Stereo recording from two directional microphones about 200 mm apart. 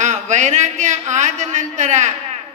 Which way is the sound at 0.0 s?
35° right (ahead or behind).